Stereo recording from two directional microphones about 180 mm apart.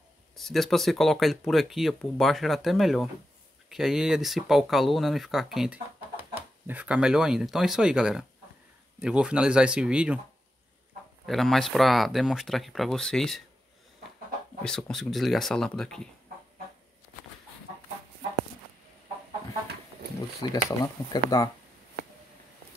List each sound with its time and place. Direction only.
0.4 s speech: centre (ahead or behind)
11.2 s speech: centre (ahead or behind)
14.6 s speech: 5° left (ahead or behind)
20.4 s speech: 25° left (ahead or behind)